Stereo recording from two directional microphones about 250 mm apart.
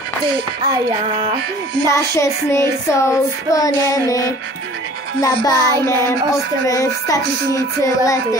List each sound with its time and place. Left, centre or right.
0.7 s music: centre
1.9 s child singing: centre